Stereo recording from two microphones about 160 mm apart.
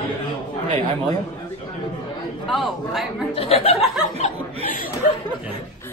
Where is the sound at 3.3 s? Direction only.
40° left (ahead or behind).